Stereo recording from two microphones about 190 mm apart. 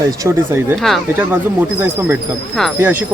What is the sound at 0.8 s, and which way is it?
Speech, 5° right (ahead or behind).